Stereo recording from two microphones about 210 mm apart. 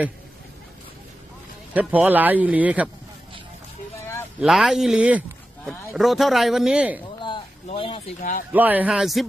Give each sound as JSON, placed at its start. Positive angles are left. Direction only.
{"t": 1.7, "sound": "a man's voice", "side_deg": -5}
{"t": 4.4, "sound": "speech", "side_deg": -5}
{"t": 7.2, "sound": "a sound", "side_deg": 25}
{"t": 8.5, "sound": "speech", "side_deg": -10}